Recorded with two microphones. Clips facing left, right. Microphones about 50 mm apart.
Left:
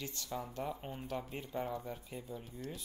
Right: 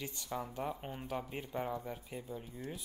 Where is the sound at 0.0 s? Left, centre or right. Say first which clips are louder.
Right 1 dB; centre.